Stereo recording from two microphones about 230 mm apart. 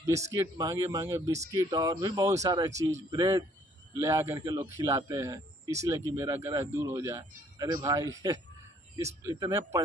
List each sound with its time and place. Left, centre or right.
0.0 s a man's voice: centre